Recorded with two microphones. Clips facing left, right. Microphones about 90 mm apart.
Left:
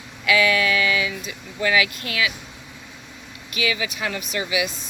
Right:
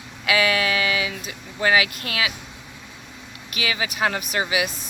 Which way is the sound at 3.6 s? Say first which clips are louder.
Left 1 dB; 35° right (ahead or behind).